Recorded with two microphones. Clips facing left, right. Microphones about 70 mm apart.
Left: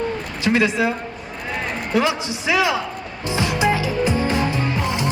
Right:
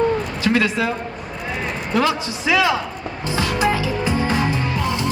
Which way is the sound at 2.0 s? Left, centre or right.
Left.